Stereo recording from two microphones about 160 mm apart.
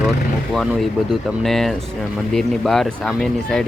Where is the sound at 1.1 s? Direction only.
Centre (ahead or behind).